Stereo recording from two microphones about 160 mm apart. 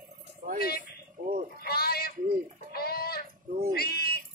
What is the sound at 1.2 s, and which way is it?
Sheep, 60° right (ahead or behind).